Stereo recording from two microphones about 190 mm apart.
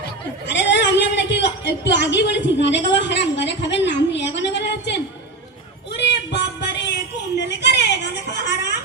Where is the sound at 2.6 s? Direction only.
70° left (ahead or behind).